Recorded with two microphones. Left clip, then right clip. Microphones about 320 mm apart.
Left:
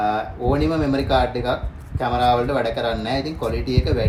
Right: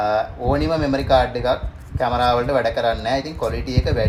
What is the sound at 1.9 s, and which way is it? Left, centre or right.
A man's voice, centre.